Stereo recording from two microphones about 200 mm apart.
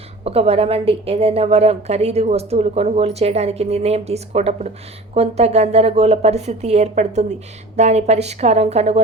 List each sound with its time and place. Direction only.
0.3 s a woman's voice: 30° right (ahead or behind)